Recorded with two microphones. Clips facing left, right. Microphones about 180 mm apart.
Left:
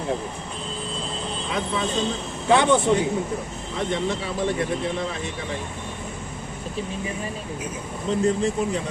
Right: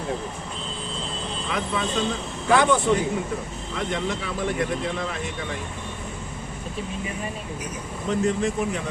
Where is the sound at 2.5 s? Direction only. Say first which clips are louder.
Left 1 dB; 25° left (ahead or behind).